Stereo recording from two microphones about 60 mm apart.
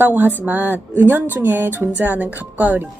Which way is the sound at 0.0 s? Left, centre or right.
Right.